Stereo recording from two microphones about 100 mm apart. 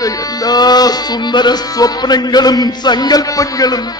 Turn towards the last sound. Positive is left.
turn(degrees=40)  # may be behind; listen again after turning